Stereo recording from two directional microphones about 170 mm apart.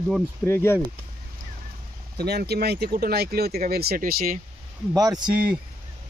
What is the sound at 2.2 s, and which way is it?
Speech, 70° right (ahead or behind).